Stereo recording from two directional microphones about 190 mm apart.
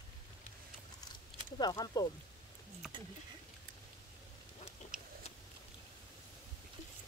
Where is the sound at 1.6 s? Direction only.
20° left (ahead or behind).